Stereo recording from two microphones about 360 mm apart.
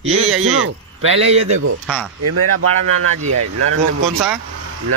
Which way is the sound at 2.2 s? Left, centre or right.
Right.